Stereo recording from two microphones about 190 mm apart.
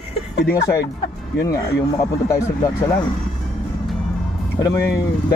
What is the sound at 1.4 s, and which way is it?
Speech, 15° left (ahead or behind).